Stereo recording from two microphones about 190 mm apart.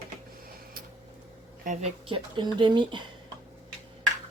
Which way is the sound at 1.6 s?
40° right (ahead or behind).